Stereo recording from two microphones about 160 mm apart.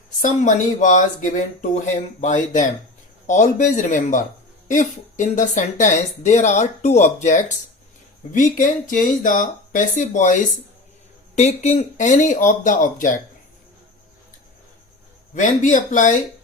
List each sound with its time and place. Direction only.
0.2 s speech: 55° left (ahead or behind)
15.4 s speech: 50° left (ahead or behind)